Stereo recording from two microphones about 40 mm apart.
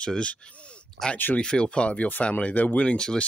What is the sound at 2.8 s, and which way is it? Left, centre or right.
Speech, left.